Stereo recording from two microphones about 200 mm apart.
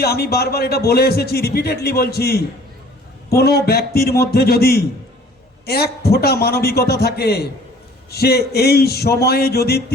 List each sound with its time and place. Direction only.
0.0 s a man's voice: 50° left (ahead or behind)